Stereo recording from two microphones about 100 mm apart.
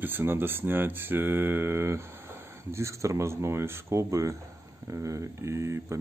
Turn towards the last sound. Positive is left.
turn(degrees=-30)  # may be behind; listen again after turning